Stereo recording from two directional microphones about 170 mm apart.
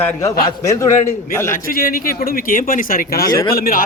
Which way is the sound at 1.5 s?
55° left (ahead or behind).